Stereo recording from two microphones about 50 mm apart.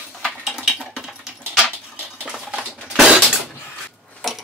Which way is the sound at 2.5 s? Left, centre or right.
Centre.